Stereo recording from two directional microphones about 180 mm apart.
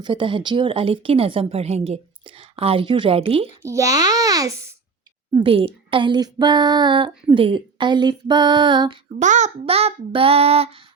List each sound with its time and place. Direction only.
0.0 s speech: 25° right (ahead or behind)
3.6 s a child's voice: 15° right (ahead or behind)
5.3 s speech: 30° right (ahead or behind)
9.1 s speech: 40° right (ahead or behind)